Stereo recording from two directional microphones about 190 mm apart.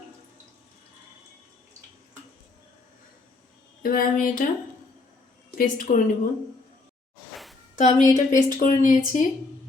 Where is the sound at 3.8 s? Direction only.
50° left (ahead or behind).